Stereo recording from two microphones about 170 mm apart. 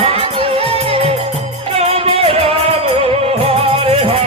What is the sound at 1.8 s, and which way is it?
Music, 35° right (ahead or behind).